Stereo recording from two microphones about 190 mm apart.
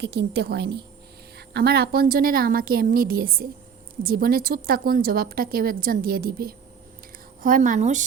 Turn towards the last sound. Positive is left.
turn(degrees=-40)  # may be behind; listen again after turning